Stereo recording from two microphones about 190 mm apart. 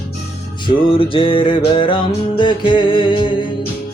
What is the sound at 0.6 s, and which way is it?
Music, 30° left (ahead or behind).